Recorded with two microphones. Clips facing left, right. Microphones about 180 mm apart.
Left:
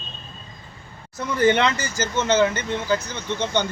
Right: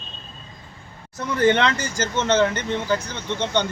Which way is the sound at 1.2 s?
10° left (ahead or behind).